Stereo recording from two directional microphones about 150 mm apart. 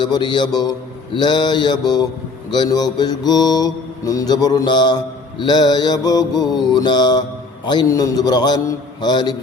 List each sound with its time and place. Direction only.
0.0 s mantra: 30° left (ahead or behind)